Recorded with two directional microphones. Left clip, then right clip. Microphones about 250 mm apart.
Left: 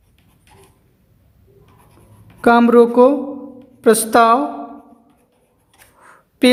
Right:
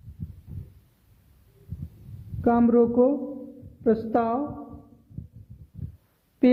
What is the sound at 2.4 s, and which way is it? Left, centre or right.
Speech, centre.